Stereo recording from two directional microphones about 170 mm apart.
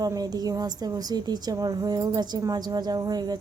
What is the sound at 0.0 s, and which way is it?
A woman's voice, 20° right (ahead or behind).